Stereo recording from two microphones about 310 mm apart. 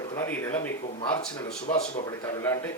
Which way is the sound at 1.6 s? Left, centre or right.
Left.